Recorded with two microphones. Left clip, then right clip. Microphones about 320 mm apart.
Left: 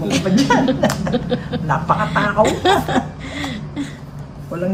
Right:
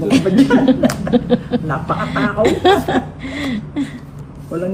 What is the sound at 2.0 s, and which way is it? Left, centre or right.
Chuckle, centre.